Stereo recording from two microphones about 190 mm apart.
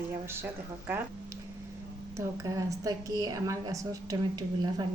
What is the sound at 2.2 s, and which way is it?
A woman's voice, 15° right (ahead or behind).